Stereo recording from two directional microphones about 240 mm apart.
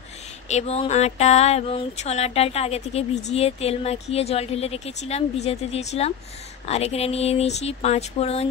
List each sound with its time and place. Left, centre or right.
0.5 s speech: left